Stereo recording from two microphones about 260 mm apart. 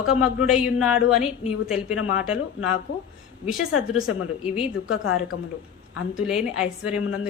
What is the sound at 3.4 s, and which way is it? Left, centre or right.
A woman's voice, centre.